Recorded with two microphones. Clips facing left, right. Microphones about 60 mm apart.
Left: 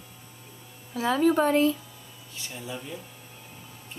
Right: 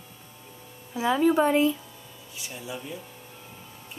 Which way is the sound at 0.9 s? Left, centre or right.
Centre.